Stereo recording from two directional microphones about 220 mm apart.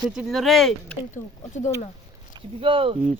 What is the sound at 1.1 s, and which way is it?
Speech, 30° left (ahead or behind).